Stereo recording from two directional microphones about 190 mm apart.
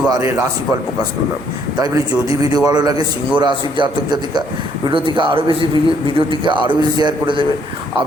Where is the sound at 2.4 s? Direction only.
20° right (ahead or behind).